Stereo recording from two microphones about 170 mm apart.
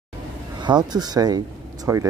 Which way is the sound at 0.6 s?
25° right (ahead or behind).